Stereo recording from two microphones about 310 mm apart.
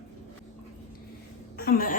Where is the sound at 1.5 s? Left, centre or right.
Left.